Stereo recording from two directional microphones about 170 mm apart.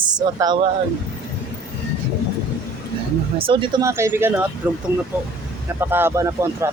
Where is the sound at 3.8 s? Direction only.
15° right (ahead or behind).